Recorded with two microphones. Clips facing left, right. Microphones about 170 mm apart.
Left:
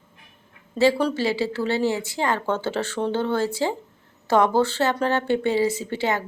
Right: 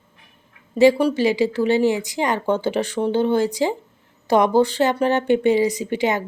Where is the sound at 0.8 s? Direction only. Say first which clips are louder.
Right 5 dB; 15° right (ahead or behind).